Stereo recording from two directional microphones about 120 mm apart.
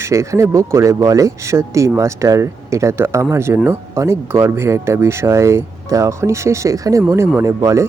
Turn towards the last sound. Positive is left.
turn(degrees=-25)  # may be behind; listen again after turning